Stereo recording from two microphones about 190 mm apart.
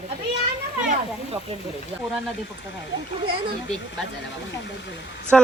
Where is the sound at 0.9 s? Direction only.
30° right (ahead or behind).